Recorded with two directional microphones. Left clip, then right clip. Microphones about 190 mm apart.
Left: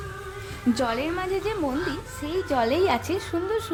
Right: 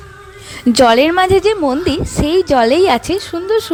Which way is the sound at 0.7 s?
45° right (ahead or behind).